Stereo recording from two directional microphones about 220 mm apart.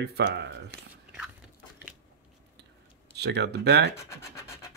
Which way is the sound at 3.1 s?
50° right (ahead or behind).